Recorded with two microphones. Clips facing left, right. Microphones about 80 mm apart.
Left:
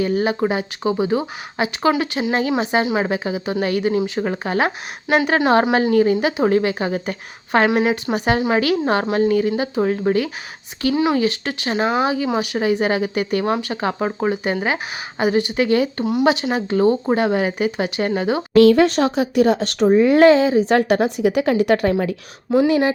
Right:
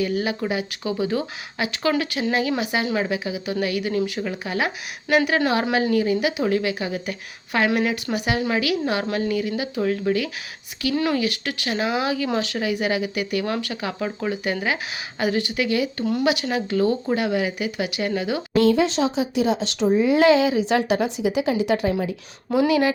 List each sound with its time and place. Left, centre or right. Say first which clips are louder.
0.0 s speech: left 5 dB; left
2.5 s speech: left 5 dB; left
4.2 s speech: left 5 dB; left
7.7 s speech: left 4 dB; left
10.9 s speech: left 4 dB; centre
18.5 s speech: left 6 dB; left